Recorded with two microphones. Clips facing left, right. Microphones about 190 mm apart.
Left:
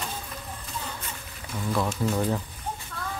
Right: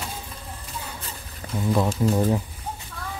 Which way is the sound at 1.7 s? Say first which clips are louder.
Right 5 dB; 20° right (ahead or behind).